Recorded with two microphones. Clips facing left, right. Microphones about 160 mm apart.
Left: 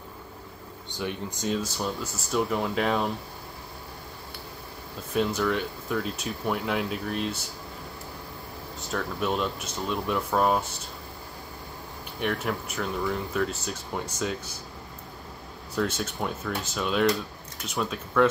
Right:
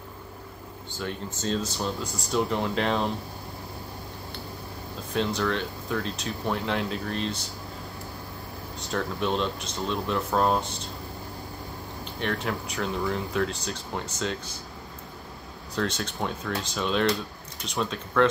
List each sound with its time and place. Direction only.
0.9 s speech: 15° left (ahead or behind)
5.1 s speech: 10° left (ahead or behind)
8.9 s speech: 5° left (ahead or behind)
12.2 s speech: 5° left (ahead or behind)
15.7 s speech: 5° left (ahead or behind)